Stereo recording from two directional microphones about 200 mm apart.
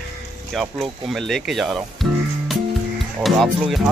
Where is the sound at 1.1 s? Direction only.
Centre (ahead or behind).